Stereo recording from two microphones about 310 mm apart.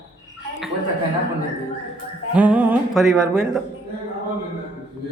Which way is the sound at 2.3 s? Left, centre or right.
Centre.